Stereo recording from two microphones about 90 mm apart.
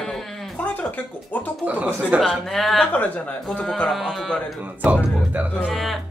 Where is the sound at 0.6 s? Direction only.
15° left (ahead or behind).